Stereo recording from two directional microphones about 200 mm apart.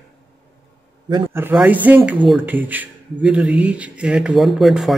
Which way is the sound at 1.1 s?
10° right (ahead or behind).